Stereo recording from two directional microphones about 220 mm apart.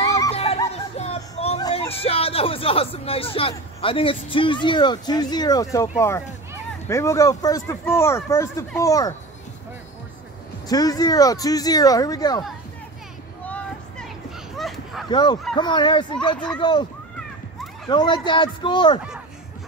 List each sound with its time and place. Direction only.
0.3 s music: 25° left (ahead or behind)
1.7 s speech: 25° left (ahead or behind)
10.7 s speech: 15° left (ahead or behind)
13.5 s vehicle: 5° left (ahead or behind)
15.0 s speech: 20° left (ahead or behind)
17.8 s speech: 20° left (ahead or behind)